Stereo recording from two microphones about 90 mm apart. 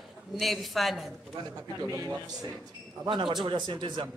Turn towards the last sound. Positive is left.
turn(degrees=-65)  # may be behind; listen again after turning